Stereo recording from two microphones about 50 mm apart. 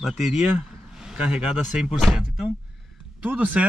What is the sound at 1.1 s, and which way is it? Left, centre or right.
Speech, centre.